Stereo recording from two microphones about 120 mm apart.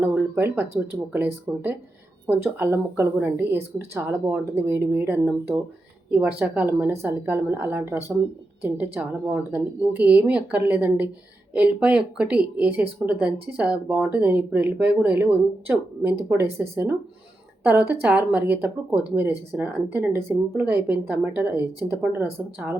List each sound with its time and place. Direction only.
0.0 s speech: 15° right (ahead or behind)